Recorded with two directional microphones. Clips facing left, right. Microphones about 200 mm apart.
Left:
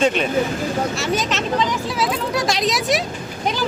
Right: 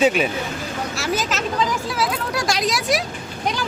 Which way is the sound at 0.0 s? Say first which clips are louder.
Left 1 dB; 5° right (ahead or behind).